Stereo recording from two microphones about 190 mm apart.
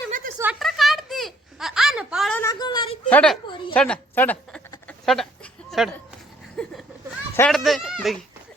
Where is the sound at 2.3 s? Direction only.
20° left (ahead or behind).